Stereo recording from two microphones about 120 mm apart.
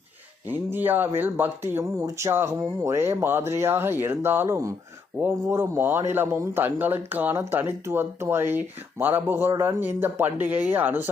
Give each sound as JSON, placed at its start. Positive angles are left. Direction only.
{"t": 0.4, "sound": "speech", "side_deg": -15}